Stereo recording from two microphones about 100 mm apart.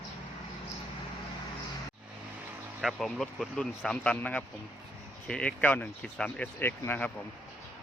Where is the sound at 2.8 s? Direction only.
Centre (ahead or behind).